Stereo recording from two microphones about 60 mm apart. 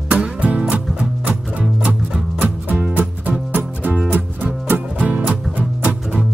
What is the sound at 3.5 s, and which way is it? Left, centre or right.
Music, right.